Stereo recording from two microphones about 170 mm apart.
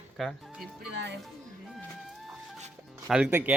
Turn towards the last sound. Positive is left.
turn(degrees=-10)  # may be behind; listen again after turning